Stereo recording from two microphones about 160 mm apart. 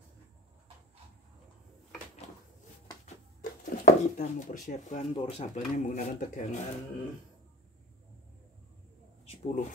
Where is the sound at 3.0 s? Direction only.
55° left (ahead or behind).